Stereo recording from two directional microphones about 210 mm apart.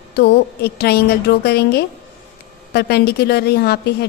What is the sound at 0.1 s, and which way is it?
A woman's voice, 50° left (ahead or behind).